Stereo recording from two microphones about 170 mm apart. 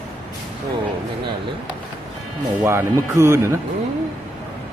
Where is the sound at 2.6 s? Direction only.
15° right (ahead or behind).